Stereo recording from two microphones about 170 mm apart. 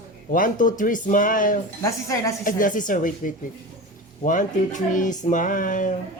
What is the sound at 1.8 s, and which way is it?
Speech, 20° left (ahead or behind).